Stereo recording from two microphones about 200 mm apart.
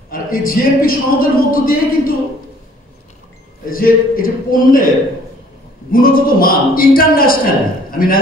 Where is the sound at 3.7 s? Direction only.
45° left (ahead or behind).